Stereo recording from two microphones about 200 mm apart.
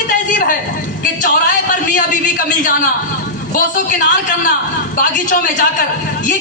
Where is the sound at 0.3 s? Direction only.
40° left (ahead or behind).